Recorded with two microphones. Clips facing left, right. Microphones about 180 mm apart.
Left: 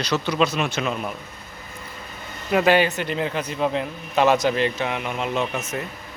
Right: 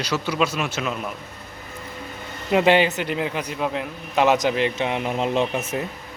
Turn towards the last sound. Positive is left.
turn(degrees=-30)  # may be behind; listen again after turning